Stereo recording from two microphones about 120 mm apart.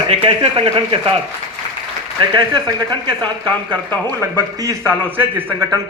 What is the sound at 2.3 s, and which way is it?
Speech, 35° right (ahead or behind).